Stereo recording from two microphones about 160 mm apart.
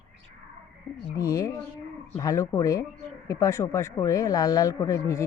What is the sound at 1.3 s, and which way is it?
Speech, 25° left (ahead or behind).